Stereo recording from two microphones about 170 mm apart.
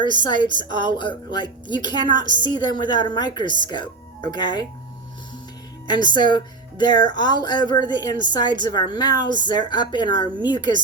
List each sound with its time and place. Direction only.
0.0 s a woman's voice: 25° left (ahead or behind)
5.9 s a woman's voice: 25° left (ahead or behind)